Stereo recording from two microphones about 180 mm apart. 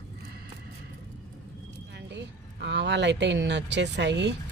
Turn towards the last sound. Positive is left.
turn(degrees=-75)  # may be behind; listen again after turning